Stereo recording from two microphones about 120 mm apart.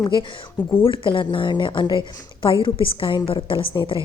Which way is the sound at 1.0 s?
45° left (ahead or behind).